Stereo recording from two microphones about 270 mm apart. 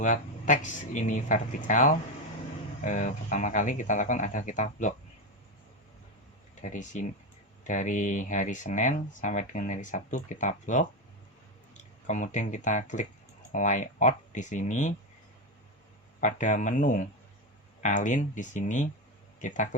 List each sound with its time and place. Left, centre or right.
0.0 s speech: left
6.6 s speech: left
16.2 s speech: left